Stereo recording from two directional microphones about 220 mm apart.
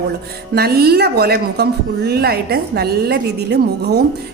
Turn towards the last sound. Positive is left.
turn(degrees=-50)  # may be behind; listen again after turning